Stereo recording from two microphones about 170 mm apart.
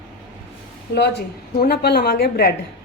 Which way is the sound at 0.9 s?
75° left (ahead or behind).